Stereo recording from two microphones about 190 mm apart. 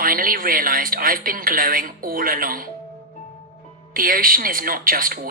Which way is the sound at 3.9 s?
45° right (ahead or behind).